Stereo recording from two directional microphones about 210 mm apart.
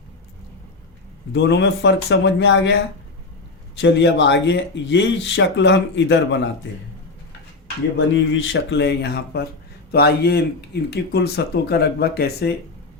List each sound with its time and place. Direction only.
1.3 s speech: 55° left (ahead or behind)
7.9 s speech: 60° left (ahead or behind)